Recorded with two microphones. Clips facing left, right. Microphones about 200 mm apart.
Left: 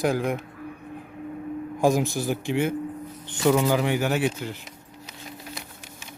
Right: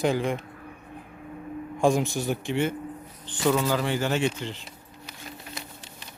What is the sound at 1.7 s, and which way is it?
Speech, 5° left (ahead or behind).